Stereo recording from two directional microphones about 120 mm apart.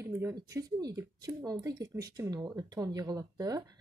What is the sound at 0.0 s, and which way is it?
A woman's voice, 25° right (ahead or behind).